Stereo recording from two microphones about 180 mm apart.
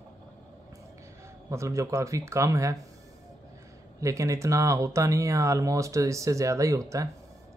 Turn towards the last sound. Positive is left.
turn(degrees=-15)  # may be behind; listen again after turning